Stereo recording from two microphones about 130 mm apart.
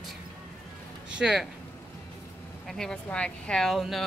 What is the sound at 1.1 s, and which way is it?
Speech, 5° right (ahead or behind).